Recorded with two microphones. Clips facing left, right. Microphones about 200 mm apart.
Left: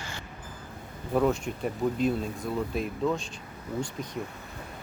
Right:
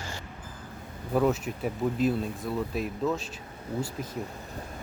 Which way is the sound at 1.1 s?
5° right (ahead or behind).